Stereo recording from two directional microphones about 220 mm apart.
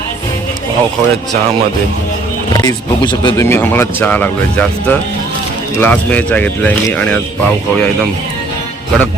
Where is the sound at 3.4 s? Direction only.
10° left (ahead or behind).